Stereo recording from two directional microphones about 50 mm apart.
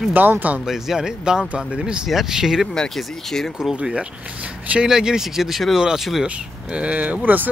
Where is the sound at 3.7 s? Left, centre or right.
Right.